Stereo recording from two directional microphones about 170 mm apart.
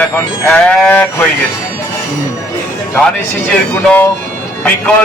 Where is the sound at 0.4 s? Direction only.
10° left (ahead or behind).